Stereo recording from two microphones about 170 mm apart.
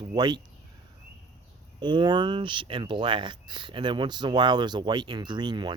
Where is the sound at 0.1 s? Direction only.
25° right (ahead or behind).